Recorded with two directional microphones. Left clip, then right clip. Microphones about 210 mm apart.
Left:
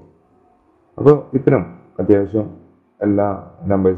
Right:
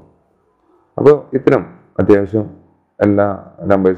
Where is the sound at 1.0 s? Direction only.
20° right (ahead or behind).